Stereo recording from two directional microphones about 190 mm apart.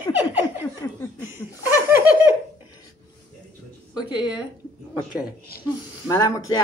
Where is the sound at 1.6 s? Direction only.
10° right (ahead or behind).